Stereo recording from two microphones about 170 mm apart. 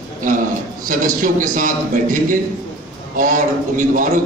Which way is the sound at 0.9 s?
50° right (ahead or behind).